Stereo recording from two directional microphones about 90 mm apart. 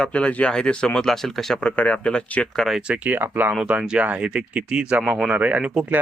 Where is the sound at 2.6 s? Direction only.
5° right (ahead or behind).